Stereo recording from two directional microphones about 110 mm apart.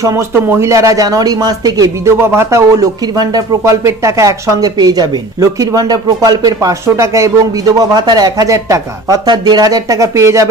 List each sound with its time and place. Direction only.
0.0 s speech: 25° right (ahead or behind)
2.2 s speech: 25° right (ahead or behind)